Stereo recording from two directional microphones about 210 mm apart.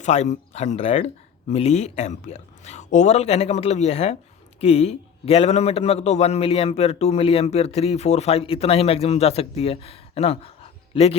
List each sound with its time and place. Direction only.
0.0 s a man's voice: 35° left (ahead or behind)